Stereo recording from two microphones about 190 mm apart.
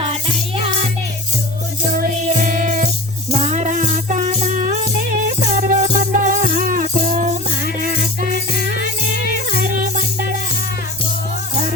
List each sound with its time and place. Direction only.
1.9 s music: 50° right (ahead or behind)